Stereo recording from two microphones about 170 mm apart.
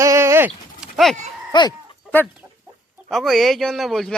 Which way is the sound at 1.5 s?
25° left (ahead or behind).